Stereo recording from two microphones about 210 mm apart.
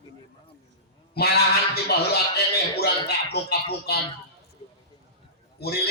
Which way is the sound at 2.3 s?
50° left (ahead or behind).